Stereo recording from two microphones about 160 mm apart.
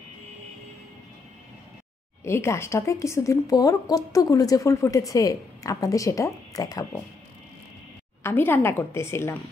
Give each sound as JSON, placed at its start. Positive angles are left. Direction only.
{"t": 2.2, "sound": "a woman's voice", "side_deg": 15}
{"t": 8.2, "sound": "a woman's voice", "side_deg": 15}